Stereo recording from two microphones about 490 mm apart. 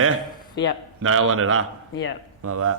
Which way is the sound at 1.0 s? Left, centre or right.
Right.